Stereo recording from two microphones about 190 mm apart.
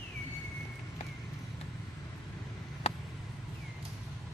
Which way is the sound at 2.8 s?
35° left (ahead or behind).